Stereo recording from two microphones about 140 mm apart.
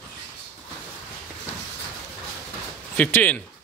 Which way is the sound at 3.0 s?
10° left (ahead or behind).